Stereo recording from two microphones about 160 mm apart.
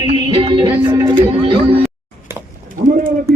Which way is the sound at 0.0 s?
30° right (ahead or behind).